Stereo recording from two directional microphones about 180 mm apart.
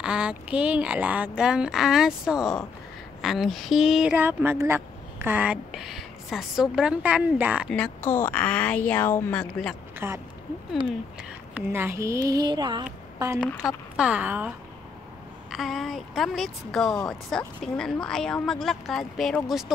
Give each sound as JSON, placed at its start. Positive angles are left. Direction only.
{"t": 0.0, "sound": "speech", "side_deg": -5}
{"t": 7.7, "sound": "a woman's voice", "side_deg": 5}
{"t": 9.9, "sound": "speech", "side_deg": -15}
{"t": 11.5, "sound": "a woman's voice", "side_deg": -15}
{"t": 13.9, "sound": "a woman's voice", "side_deg": -5}
{"t": 15.5, "sound": "speech", "side_deg": 0}